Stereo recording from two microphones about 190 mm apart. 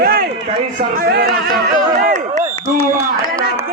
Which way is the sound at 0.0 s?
50° right (ahead or behind).